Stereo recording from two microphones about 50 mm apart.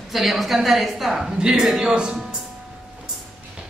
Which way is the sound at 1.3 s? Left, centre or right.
Centre.